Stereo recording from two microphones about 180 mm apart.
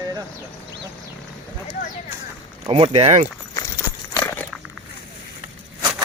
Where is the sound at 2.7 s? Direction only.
30° right (ahead or behind).